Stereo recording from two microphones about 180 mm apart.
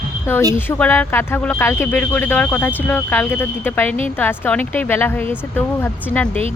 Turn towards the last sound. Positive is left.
turn(degrees=10)  # may be behind; listen again after turning